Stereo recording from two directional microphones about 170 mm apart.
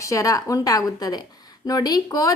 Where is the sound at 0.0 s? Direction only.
20° left (ahead or behind).